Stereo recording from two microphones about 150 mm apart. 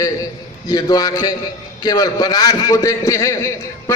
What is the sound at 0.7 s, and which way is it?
A man's voice, 25° left (ahead or behind).